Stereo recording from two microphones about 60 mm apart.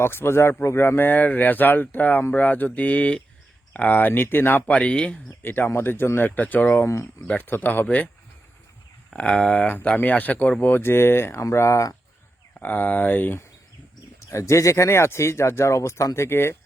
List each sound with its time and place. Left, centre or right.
0.0 s speech: left
2.3 s mantra: left
3.7 s speech: left
4.7 s mantra: centre
5.4 s speech: left
6.8 s speech: left
7.3 s mantra: left
9.1 s speech: centre
9.6 s mantra: left
10.6 s speech: left
11.5 s speech: left
12.5 s speech: left
14.3 s speech: left